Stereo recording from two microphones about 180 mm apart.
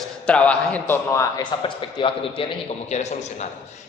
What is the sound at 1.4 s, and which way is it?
Speech, 30° left (ahead or behind).